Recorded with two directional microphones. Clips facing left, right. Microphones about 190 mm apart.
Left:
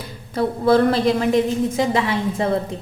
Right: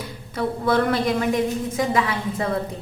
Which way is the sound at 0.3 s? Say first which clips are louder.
Left 5 dB; 30° left (ahead or behind).